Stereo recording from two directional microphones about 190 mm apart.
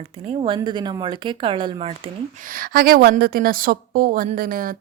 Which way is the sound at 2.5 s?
50° right (ahead or behind).